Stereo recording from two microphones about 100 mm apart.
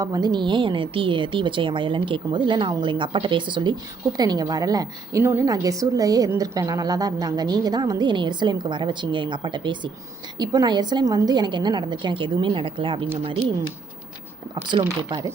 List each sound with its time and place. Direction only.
0.0 s a woman's voice: 40° right (ahead or behind)
4.2 s a woman's voice: 40° right (ahead or behind)
5.2 s a woman's voice: 25° right (ahead or behind); by 9.9 s 50° right (ahead or behind)
10.3 s a woman's voice: 40° right (ahead or behind); by 13.4 s 70° right (ahead or behind)
14.5 s a woman's voice: 50° right (ahead or behind)